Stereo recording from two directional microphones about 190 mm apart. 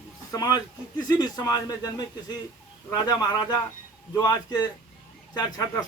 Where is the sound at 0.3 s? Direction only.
20° left (ahead or behind).